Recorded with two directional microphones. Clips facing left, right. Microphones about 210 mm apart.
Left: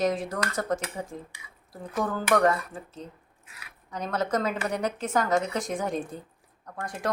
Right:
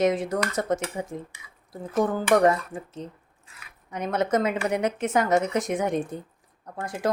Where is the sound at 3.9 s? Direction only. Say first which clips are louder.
Right 4 dB; 20° right (ahead or behind).